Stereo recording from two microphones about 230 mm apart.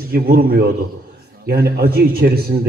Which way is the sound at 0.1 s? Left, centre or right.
Right.